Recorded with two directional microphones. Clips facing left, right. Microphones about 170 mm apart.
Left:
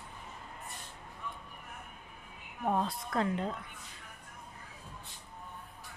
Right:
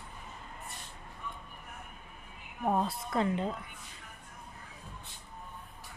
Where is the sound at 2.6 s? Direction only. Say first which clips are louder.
Right 1 dB; 5° right (ahead or behind).